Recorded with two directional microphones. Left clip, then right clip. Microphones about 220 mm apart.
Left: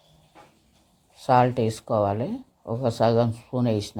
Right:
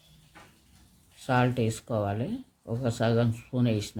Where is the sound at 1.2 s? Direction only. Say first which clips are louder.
Left 7 dB; 10° left (ahead or behind).